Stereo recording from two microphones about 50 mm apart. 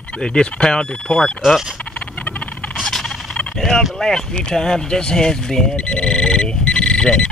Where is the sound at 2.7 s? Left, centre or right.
Centre.